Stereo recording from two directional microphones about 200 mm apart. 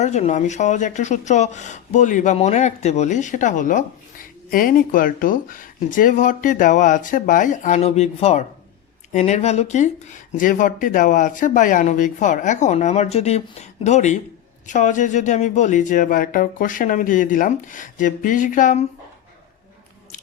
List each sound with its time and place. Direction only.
0.0 s speech: 35° left (ahead or behind)